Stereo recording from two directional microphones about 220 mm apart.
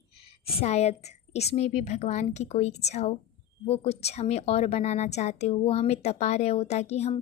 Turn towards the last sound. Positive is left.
turn(degrees=30)  # may be behind; listen again after turning